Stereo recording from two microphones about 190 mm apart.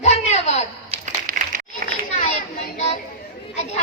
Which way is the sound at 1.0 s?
45° right (ahead or behind).